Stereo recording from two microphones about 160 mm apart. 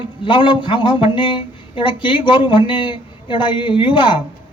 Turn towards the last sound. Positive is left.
turn(degrees=30)  # may be behind; listen again after turning